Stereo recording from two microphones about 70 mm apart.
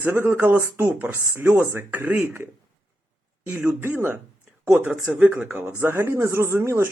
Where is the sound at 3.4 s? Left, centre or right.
Right.